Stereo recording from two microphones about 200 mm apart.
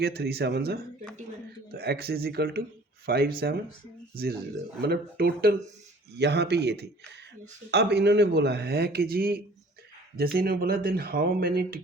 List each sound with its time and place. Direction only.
0.0 s speech: 50° right (ahead or behind)
4.8 s speech: 50° right (ahead or behind)